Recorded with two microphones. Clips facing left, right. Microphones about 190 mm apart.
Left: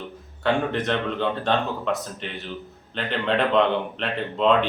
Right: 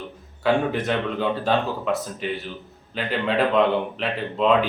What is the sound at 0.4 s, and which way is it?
A man's voice, 5° right (ahead or behind).